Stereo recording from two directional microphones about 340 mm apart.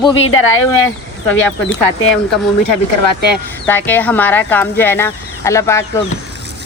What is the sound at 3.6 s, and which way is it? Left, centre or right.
Speech, centre.